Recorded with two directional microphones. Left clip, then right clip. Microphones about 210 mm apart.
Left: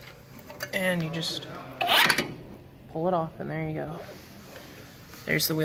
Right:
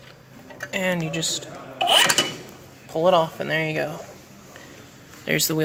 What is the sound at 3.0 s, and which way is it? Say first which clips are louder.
Speech: right 9 dB; 60° right (ahead or behind).